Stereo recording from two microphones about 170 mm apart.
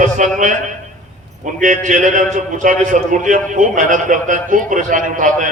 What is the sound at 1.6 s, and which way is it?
A man's voice, 50° right (ahead or behind).